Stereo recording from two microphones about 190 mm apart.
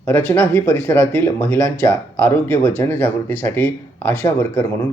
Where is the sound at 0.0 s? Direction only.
10° left (ahead or behind).